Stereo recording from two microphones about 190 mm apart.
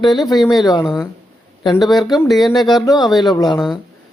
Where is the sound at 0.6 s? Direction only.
20° left (ahead or behind).